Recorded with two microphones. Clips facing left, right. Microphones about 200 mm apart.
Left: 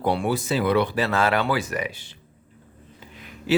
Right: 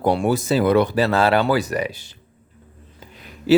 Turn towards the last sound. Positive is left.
turn(degrees=-35)  # may be behind; listen again after turning